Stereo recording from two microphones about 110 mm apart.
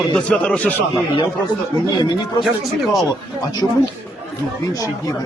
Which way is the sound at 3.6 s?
Centre (ahead or behind).